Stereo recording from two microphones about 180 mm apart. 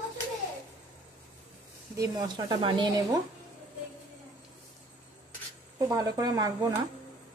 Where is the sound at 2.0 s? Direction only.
25° right (ahead or behind).